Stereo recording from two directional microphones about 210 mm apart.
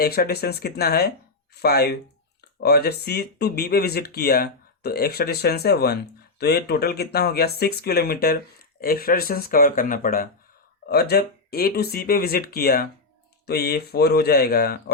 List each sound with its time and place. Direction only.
0.0 s speech: 45° left (ahead or behind)